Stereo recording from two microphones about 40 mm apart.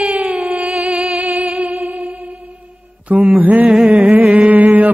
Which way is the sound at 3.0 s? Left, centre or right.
Right.